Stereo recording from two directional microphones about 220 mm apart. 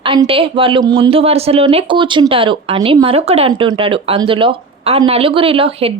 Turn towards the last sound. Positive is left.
turn(degrees=-25)  # may be behind; listen again after turning